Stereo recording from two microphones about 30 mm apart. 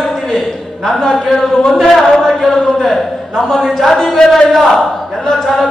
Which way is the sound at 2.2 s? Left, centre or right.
Centre.